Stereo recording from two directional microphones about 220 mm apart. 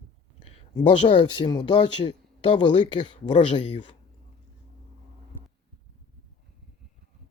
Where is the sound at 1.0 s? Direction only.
20° left (ahead or behind).